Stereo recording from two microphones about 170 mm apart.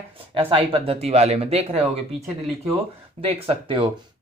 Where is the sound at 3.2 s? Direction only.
30° right (ahead or behind).